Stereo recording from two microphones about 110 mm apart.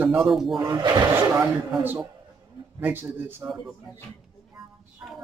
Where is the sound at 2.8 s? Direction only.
15° right (ahead or behind).